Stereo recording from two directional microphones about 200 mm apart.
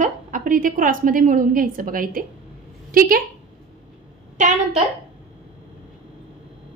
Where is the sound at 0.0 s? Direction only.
40° right (ahead or behind).